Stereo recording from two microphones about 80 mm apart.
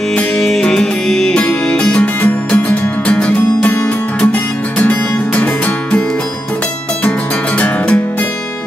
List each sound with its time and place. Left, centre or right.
0.1 s music: centre
7.1 s music: centre